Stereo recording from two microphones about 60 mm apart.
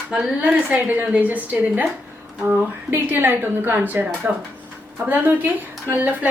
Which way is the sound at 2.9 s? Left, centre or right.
Right.